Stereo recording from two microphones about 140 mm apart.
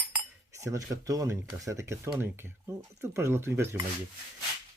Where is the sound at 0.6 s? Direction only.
25° right (ahead or behind).